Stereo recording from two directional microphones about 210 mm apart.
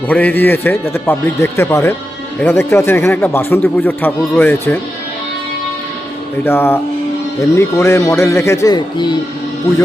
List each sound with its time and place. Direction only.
0.1 s speech: 10° left (ahead or behind)
6.4 s speech: 10° left (ahead or behind)